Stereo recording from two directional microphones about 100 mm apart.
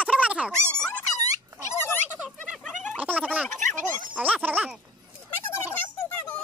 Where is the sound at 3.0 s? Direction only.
15° right (ahead or behind).